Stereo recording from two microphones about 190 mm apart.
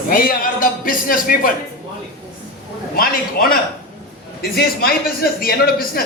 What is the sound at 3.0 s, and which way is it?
A man's voice, 50° left (ahead or behind).